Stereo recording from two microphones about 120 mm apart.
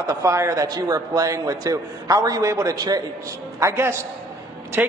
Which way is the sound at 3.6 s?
20° right (ahead or behind).